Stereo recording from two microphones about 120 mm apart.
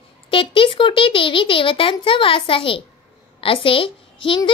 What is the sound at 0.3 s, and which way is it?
A child's voice, 45° left (ahead or behind).